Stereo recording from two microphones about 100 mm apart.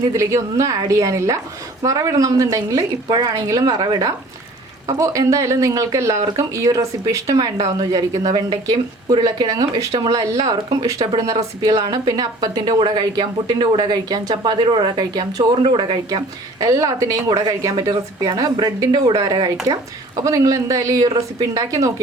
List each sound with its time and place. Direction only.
0.0 s speech: 30° right (ahead or behind)
15.6 s speech: 55° right (ahead or behind); by 22.0 s 35° right (ahead or behind)